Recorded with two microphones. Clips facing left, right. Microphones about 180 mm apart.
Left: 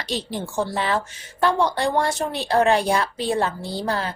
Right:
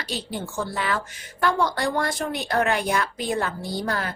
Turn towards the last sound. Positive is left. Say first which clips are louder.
# left 2 dB
turn(degrees=30)  # may be behind; listen again after turning